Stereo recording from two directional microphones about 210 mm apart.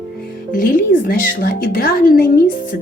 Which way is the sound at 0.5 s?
40° left (ahead or behind).